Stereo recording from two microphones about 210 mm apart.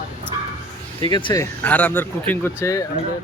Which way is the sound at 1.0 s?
20° left (ahead or behind).